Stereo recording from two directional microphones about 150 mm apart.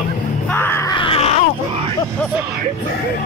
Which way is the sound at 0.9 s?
35° left (ahead or behind).